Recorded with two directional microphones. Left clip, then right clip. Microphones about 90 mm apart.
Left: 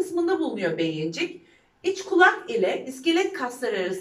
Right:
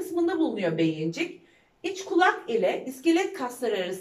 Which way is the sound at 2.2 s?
35° right (ahead or behind).